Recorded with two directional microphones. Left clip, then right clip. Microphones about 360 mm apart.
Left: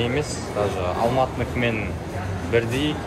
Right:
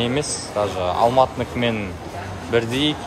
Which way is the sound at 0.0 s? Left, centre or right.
Centre.